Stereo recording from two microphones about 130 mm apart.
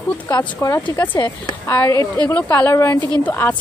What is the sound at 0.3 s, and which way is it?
Speech, 25° left (ahead or behind).